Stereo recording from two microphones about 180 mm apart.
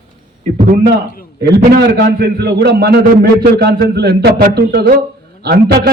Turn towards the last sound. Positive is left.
turn(degrees=-60)  # may be behind; listen again after turning